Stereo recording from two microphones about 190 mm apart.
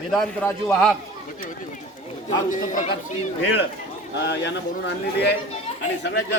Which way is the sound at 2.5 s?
45° left (ahead or behind).